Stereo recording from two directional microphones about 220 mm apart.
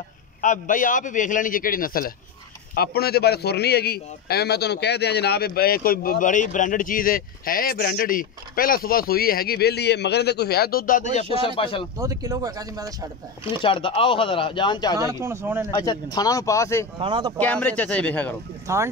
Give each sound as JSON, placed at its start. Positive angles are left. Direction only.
{"t": 0.4, "sound": "a man's voice", "side_deg": 35}
{"t": 11.3, "sound": "speech", "side_deg": 25}
{"t": 12.0, "sound": "speech", "side_deg": -15}
{"t": 13.6, "sound": "speech", "side_deg": 25}
{"t": 15.0, "sound": "speech", "side_deg": -15}
{"t": 15.7, "sound": "speech", "side_deg": 15}
{"t": 17.0, "sound": "speech", "side_deg": -20}
{"t": 17.4, "sound": "speech", "side_deg": 5}
{"t": 18.7, "sound": "speech", "side_deg": -15}